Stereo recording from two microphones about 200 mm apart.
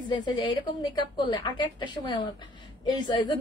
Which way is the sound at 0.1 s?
20° left (ahead or behind).